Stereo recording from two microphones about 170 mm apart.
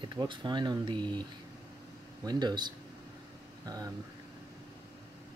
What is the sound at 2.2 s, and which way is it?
Speech, 25° right (ahead or behind).